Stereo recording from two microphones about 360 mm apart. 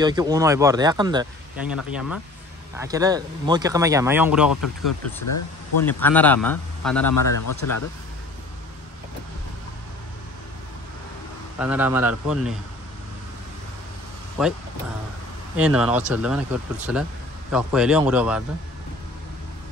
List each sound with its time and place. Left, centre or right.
0.0 s speech: centre
4.6 s speech: left
5.9 s speech: centre
7.1 s speech: left
11.5 s speech: centre
15.5 s speech: centre